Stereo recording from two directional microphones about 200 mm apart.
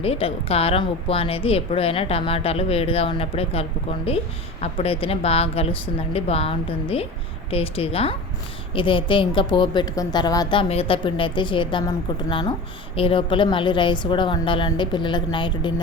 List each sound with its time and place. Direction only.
0.0 s speech: 30° left (ahead or behind)